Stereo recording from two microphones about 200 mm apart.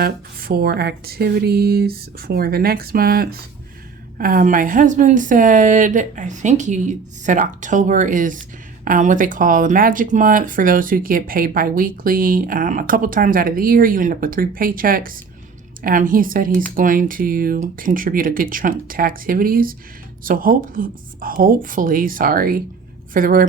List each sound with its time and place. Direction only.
0.0 s a woman's voice: 50° right (ahead or behind)